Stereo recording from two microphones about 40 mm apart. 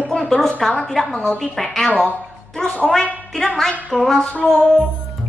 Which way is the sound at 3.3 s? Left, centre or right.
Centre.